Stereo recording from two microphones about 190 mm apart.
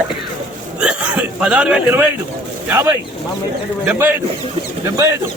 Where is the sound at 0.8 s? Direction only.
5° right (ahead or behind).